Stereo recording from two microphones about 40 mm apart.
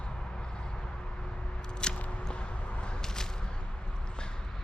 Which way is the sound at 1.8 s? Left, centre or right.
Left.